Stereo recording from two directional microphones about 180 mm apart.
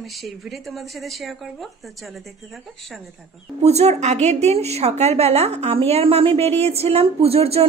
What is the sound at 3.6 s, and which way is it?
A woman's voice, 35° right (ahead or behind).